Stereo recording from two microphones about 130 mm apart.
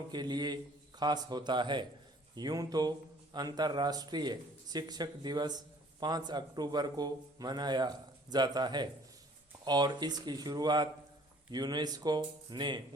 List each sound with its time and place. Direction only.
0.1 s a man's voice: 35° right (ahead or behind)